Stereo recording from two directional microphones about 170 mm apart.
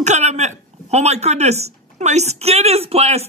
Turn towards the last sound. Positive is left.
turn(degrees=-35)  # may be behind; listen again after turning